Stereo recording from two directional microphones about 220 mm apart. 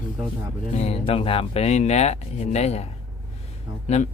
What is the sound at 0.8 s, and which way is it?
Speech, 25° left (ahead or behind).